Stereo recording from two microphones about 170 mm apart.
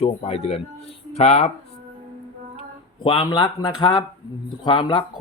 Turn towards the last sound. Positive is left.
turn(degrees=25)  # may be behind; listen again after turning